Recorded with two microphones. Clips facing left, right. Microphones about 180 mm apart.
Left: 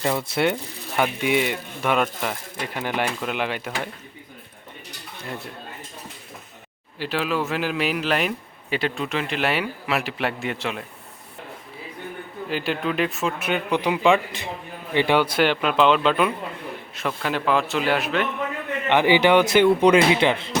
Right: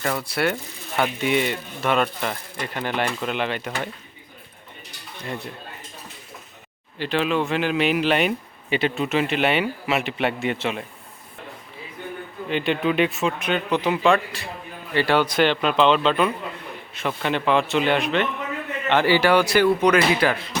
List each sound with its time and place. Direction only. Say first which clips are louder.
0.0 s speech: left 2 dB; 20° left (ahead or behind)
0.9 s speech: even; 10° left (ahead or behind)
7.0 s a man's voice: right 2 dB; 5° left (ahead or behind)
12.5 s a man's voice: right 3 dB; 5° left (ahead or behind)
18.9 s speech: left 1 dB; 15° left (ahead or behind)